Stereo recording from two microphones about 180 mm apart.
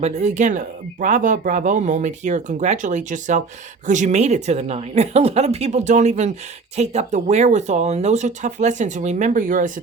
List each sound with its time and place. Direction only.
0.0 s speech: 40° right (ahead or behind)